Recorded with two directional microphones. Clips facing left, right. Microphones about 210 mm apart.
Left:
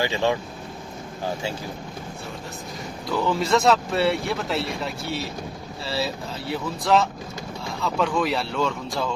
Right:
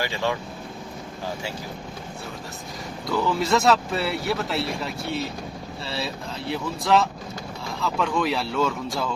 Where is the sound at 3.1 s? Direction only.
Centre (ahead or behind).